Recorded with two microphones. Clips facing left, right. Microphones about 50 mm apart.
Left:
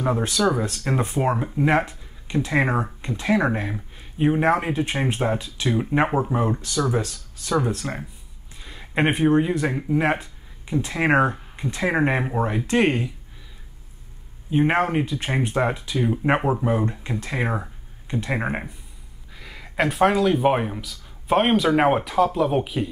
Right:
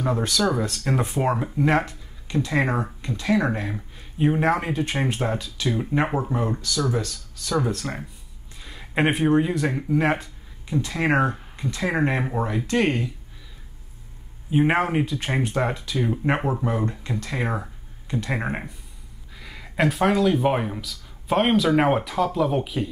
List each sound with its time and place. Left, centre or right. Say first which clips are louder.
0.0 s speech: left 2 dB; centre
3.7 s speech: even; centre
5.4 s speech: left 2 dB; centre
6.0 s speech: left 3 dB; centre
6.6 s speech: left 2 dB; left
7.6 s speech: left 1 dB; centre
10.8 s speech: left 2 dB; left
14.5 s speech: even; centre